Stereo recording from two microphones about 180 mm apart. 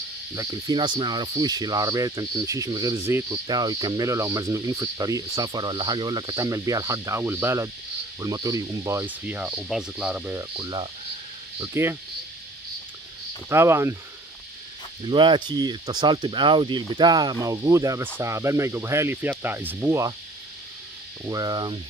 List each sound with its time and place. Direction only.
0.4 s speech: 20° right (ahead or behind)
10.5 s speech: 25° right (ahead or behind)
11.6 s speech: 15° right (ahead or behind)
13.5 s speech: 15° right (ahead or behind)
15.0 s speech: 25° right (ahead or behind)
21.2 s speech: 20° right (ahead or behind)